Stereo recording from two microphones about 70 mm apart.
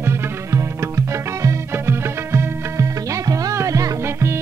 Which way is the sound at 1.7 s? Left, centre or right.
Right.